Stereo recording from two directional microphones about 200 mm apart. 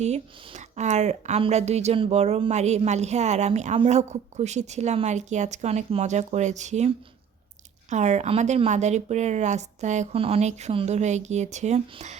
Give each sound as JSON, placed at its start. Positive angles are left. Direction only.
{"t": 0.0, "sound": "a woman's voice", "side_deg": -35}